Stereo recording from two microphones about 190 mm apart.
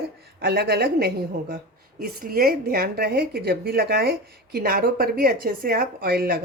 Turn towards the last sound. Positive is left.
turn(degrees=-55)  # may be behind; listen again after turning